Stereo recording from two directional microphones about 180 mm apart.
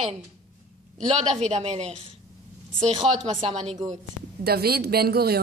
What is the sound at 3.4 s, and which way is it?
Speech, 35° right (ahead or behind).